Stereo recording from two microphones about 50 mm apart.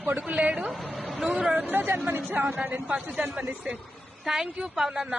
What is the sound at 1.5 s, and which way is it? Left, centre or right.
Speech, right.